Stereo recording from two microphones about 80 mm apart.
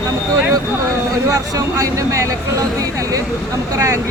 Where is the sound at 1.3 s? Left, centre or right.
Right.